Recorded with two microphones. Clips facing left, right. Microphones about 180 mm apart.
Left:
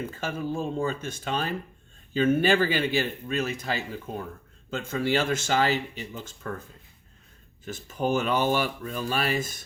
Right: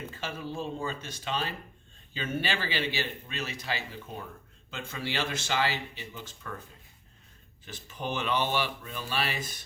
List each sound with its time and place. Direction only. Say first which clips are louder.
0.2 s speech: left 5 dB; 50° left (ahead or behind)
7.6 s speech: left 9 dB; 45° left (ahead or behind)